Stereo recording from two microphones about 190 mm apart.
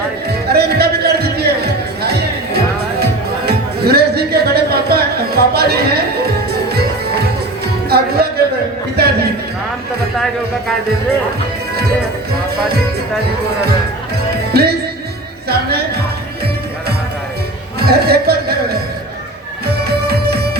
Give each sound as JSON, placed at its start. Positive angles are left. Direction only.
{"t": 0.3, "sound": "music", "side_deg": -55}
{"t": 14.5, "sound": "music", "side_deg": -55}
{"t": 17.7, "sound": "music", "side_deg": -55}